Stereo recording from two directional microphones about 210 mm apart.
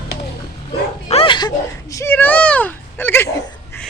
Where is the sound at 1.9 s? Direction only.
10° left (ahead or behind).